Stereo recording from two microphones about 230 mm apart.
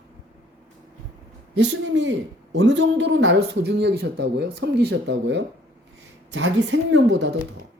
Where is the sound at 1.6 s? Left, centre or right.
Right.